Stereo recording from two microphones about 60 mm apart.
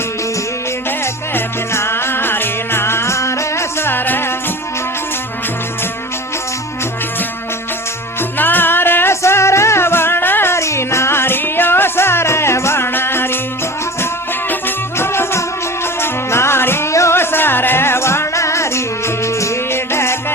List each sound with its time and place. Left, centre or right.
0.9 s music: left
8.4 s music: left
14.9 s music: left
16.9 s music: left
17.2 s music: left